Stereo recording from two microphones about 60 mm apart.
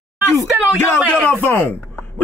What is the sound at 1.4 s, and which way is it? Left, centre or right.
Speech, left.